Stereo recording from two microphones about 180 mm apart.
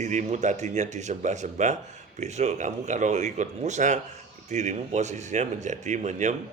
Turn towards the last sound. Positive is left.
turn(degrees=-40)  # may be behind; listen again after turning